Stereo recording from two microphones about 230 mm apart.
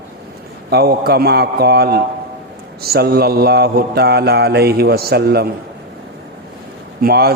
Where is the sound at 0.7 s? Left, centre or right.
Right.